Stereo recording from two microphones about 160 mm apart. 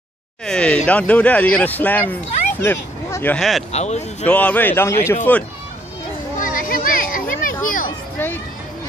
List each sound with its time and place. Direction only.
0.5 s speech: 5° left (ahead or behind)
3.3 s speech: centre (ahead or behind)
3.7 s speech: 45° left (ahead or behind)
4.3 s speech: 10° left (ahead or behind)
6.3 s a sound: 60° left (ahead or behind)
8.2 s a sound: 15° left (ahead or behind)